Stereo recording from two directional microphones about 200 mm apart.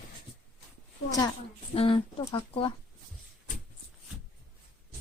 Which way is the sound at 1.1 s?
15° left (ahead or behind).